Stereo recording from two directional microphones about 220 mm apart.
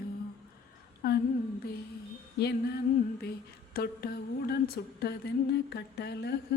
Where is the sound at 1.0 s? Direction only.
40° left (ahead or behind).